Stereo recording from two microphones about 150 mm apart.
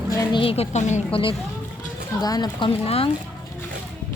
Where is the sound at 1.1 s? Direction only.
35° left (ahead or behind).